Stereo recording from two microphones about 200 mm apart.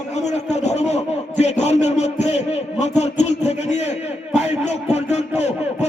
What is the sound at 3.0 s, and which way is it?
Music, 35° left (ahead or behind).